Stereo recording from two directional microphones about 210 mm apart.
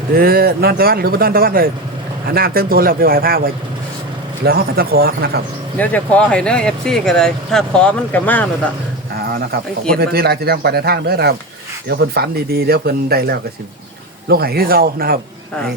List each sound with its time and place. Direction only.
0.1 s speech: 45° right (ahead or behind)
5.7 s speech: 10° left (ahead or behind)
9.9 s speech: 50° right (ahead or behind)